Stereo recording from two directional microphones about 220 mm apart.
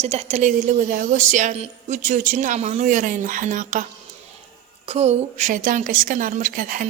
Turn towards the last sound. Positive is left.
turn(degrees=-40)  # may be behind; listen again after turning